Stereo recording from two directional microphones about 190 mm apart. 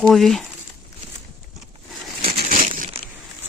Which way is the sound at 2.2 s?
50° right (ahead or behind).